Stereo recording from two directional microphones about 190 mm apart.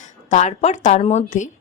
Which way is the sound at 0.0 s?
40° left (ahead or behind).